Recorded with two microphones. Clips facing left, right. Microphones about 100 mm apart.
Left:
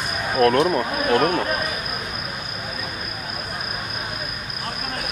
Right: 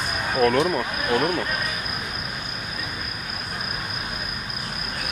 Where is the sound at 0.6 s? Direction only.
15° left (ahead or behind).